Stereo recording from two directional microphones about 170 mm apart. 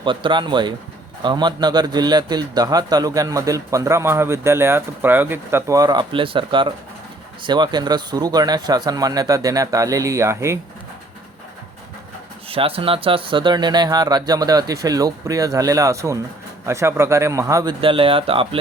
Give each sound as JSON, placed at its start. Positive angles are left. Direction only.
{"t": 0.0, "sound": "a man's voice", "side_deg": -30}
{"t": 12.5, "sound": "a man's voice", "side_deg": -35}
{"t": 17.7, "sound": "speech", "side_deg": -30}